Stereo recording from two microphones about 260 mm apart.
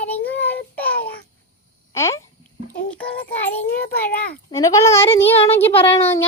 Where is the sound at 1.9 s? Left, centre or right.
Centre.